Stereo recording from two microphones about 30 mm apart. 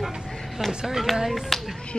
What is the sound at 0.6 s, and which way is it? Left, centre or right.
Speech, right.